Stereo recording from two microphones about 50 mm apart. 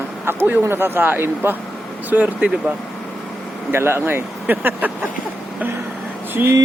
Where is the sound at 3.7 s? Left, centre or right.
Right.